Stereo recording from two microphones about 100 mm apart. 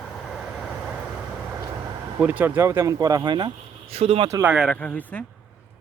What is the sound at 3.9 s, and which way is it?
Speech, 70° right (ahead or behind).